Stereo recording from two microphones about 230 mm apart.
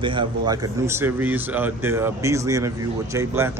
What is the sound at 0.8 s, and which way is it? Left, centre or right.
Speech, centre.